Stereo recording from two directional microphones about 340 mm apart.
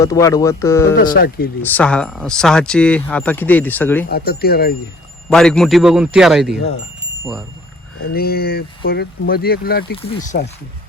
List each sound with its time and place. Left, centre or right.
0.0 s speech: centre
0.9 s speech: left
1.6 s speech: centre
4.1 s speech: left
5.3 s speech: centre
8.1 s speech: left